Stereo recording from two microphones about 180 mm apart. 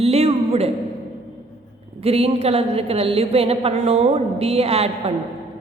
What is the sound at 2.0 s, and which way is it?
A woman's voice, 35° right (ahead or behind).